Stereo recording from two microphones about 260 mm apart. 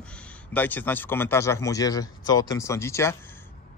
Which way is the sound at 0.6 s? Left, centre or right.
Centre.